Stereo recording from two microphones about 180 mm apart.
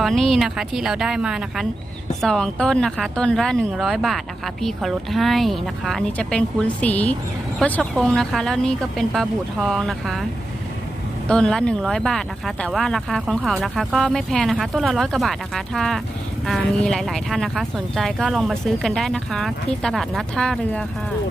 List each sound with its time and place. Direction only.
0.0 s speech: centre (ahead or behind)
11.3 s speech: 5° left (ahead or behind)